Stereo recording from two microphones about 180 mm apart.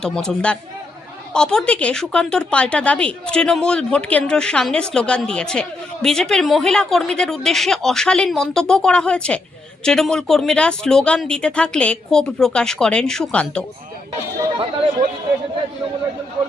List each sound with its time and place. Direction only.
0.0 s speech: 5° left (ahead or behind)